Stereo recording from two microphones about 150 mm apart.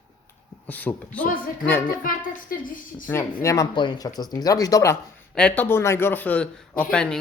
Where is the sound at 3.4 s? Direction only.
25° left (ahead or behind).